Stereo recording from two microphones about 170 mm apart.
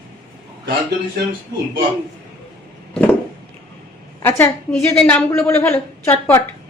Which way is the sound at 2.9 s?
10° left (ahead or behind).